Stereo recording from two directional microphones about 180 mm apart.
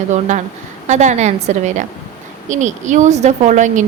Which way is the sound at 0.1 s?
40° right (ahead or behind).